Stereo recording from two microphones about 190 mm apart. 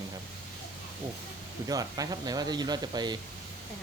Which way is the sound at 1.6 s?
20° right (ahead or behind).